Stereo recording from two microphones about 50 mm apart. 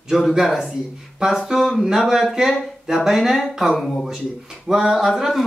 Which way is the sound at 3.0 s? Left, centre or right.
Centre.